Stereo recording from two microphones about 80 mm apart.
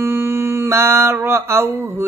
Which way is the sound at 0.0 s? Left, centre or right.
Right.